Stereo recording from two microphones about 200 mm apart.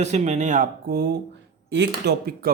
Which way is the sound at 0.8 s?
55° right (ahead or behind).